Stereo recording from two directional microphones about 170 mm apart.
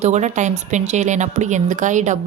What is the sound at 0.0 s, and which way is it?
A woman's voice, 45° right (ahead or behind).